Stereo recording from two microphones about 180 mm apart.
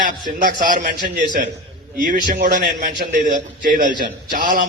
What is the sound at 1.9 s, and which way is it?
A man's voice, 50° right (ahead or behind).